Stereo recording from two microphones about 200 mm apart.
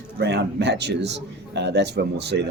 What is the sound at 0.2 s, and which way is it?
A man's voice, 55° right (ahead or behind).